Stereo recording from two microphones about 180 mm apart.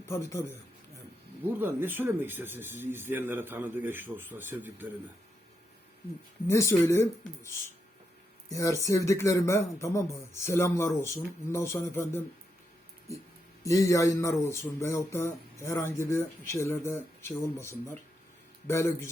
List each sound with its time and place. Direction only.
0.0 s speech: 15° left (ahead or behind)
1.5 s speech: 10° right (ahead or behind)
6.5 s speech: 15° left (ahead or behind)
13.6 s speech: 20° left (ahead or behind)